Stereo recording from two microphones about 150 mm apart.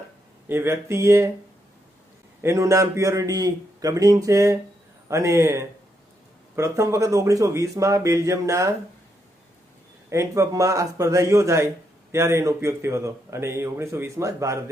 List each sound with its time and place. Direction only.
0.4 s speech: 15° right (ahead or behind)
2.4 s speech: 20° right (ahead or behind)
10.1 s speech: 20° right (ahead or behind)